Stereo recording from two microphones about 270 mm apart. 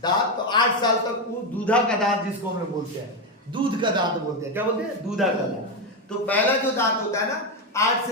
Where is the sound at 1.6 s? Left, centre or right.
Centre.